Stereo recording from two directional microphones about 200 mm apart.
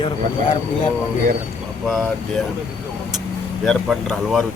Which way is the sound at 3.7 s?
Centre (ahead or behind).